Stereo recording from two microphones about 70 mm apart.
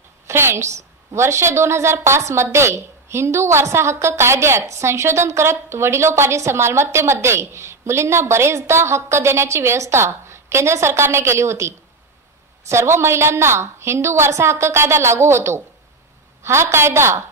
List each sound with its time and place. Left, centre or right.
0.3 s a woman's voice: right